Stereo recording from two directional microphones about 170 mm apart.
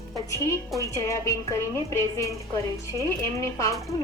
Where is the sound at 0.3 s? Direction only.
15° left (ahead or behind).